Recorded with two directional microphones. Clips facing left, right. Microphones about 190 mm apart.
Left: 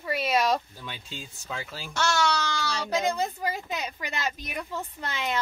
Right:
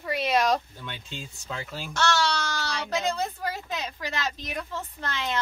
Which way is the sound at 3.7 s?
15° left (ahead or behind).